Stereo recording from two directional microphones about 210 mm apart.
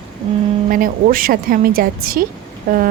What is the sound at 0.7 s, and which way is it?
Speech, 40° right (ahead or behind).